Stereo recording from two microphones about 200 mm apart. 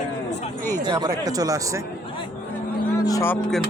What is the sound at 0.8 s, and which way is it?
Speech, 20° right (ahead or behind).